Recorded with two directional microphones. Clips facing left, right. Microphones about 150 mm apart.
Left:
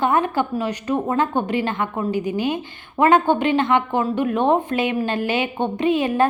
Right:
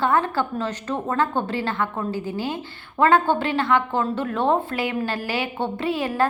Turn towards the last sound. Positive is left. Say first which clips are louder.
# left 4 dB
turn(degrees=20)  # may be behind; listen again after turning